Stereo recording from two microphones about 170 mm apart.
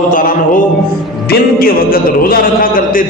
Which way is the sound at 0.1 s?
50° left (ahead or behind).